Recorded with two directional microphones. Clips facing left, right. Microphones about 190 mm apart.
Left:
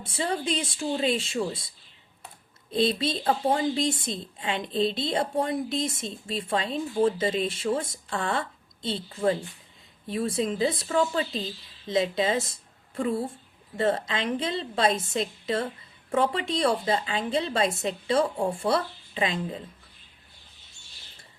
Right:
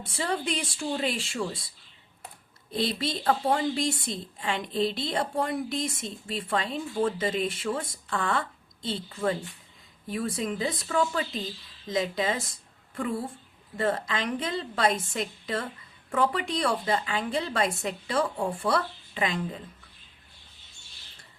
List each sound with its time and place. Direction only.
0.2 s a woman's voice: 20° left (ahead or behind)
2.7 s a woman's voice: 20° left (ahead or behind)
13.7 s a woman's voice: 25° left (ahead or behind)